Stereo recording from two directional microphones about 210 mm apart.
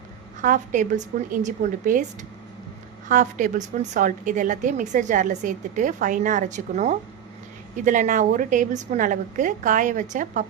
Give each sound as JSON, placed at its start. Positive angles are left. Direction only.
{"t": 0.4, "sound": "a woman's voice", "side_deg": -35}
{"t": 3.1, "sound": "a woman's voice", "side_deg": -35}